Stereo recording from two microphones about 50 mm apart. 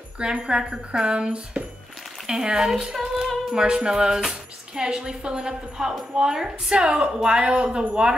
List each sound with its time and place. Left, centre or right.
0.2 s a woman's voice: right